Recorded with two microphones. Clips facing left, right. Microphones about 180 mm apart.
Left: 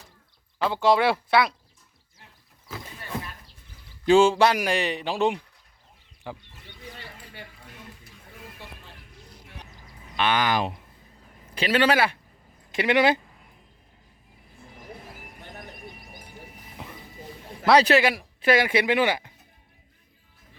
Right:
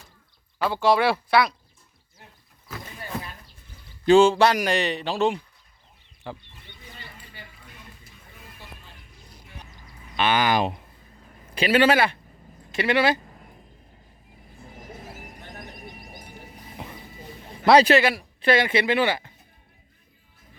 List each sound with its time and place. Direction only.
0.6 s speech: 20° left (ahead or behind)
4.0 s speech: 10° left (ahead or behind)
7.4 s a sound: 70° left (ahead or behind)
10.2 s speech: 5° right (ahead or behind)
12.7 s speech: 15° left (ahead or behind)
15.0 s a sound: 40° right (ahead or behind)
17.9 s speech: 10° left (ahead or behind)